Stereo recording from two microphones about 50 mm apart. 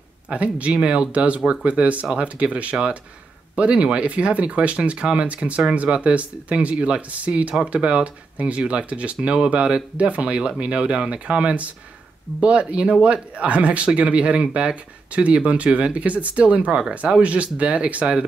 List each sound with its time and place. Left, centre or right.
0.3 s speech: right